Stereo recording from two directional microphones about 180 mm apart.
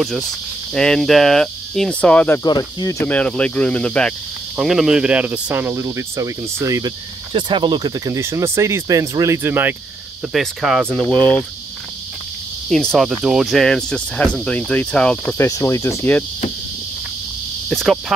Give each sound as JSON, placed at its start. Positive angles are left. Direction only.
{"t": 0.7, "sound": "speech", "side_deg": 5}
{"t": 2.4, "sound": "speech", "side_deg": 20}
{"t": 12.6, "sound": "speech", "side_deg": 5}
{"t": 15.3, "sound": "speech", "side_deg": 15}
{"t": 17.6, "sound": "speech", "side_deg": 0}